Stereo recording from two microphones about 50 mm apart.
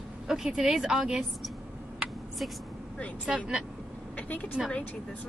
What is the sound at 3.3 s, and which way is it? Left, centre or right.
A woman's voice, centre.